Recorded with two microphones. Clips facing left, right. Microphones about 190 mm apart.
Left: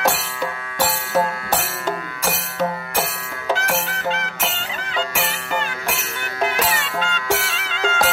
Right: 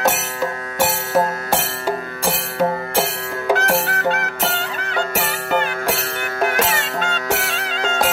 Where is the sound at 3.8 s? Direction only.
60° right (ahead or behind).